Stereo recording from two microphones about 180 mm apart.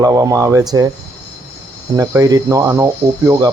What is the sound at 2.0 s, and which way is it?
Speech, 20° right (ahead or behind).